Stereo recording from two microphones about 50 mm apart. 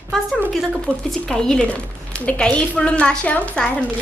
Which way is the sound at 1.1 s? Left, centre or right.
Centre.